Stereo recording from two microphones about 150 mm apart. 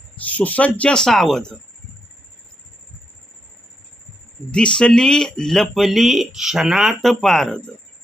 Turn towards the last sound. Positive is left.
turn(degrees=5)  # may be behind; listen again after turning